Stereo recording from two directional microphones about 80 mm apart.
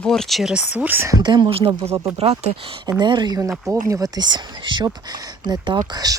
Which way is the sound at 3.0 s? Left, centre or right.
Right.